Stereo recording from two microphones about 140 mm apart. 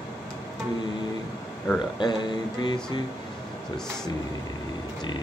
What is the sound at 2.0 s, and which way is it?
Speech, 30° left (ahead or behind).